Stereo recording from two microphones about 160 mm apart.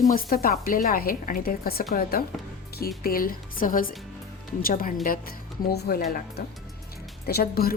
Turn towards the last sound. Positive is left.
turn(degrees=70)  # may be behind; listen again after turning